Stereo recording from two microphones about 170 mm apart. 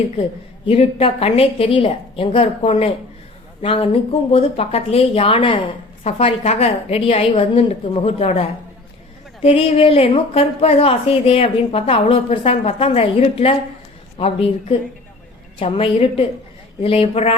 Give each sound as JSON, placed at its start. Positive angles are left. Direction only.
{"t": 0.6, "sound": "a woman's voice", "side_deg": 35}